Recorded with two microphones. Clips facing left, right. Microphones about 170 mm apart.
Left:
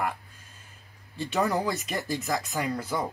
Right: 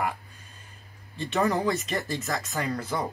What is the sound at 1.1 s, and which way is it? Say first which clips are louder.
Speech: right 1 dB; 5° left (ahead or behind).